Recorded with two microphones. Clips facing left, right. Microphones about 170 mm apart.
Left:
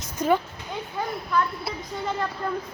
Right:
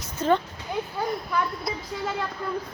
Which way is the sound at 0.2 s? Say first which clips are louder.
Even; 10° left (ahead or behind).